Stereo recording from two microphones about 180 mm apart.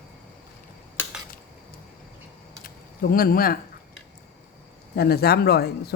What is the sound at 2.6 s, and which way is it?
Speech, 55° left (ahead or behind).